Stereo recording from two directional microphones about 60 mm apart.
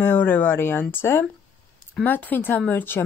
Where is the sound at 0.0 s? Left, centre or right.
Left.